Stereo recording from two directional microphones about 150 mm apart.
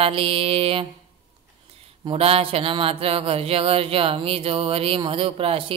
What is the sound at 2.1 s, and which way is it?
Music, 40° right (ahead or behind).